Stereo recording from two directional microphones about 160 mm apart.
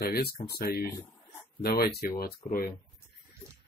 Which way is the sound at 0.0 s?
80° left.